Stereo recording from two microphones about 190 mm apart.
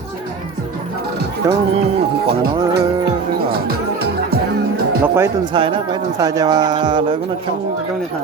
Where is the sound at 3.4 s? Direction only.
50° right (ahead or behind).